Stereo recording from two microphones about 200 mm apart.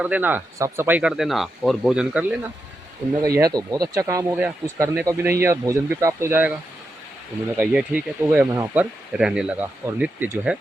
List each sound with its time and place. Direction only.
0.0 s speech: 10° right (ahead or behind)
3.2 s speech: 15° right (ahead or behind)
7.5 s speech: 10° right (ahead or behind)